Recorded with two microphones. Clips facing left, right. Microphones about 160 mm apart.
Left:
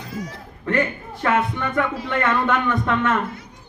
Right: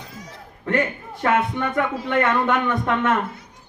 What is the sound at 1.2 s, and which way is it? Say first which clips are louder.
A man's voice: right 1 dB; 20° right (ahead or behind).